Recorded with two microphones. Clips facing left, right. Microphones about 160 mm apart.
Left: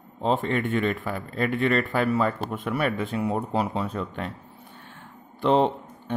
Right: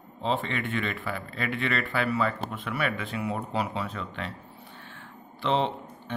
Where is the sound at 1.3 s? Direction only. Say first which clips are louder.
Left 7 dB; 45° left (ahead or behind).